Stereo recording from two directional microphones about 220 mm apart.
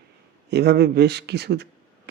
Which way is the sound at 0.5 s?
50° right (ahead or behind).